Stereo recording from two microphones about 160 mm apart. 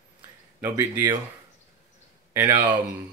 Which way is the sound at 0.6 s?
25° right (ahead or behind).